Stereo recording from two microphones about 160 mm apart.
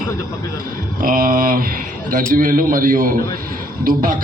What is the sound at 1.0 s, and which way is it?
A man's voice, 60° right (ahead or behind).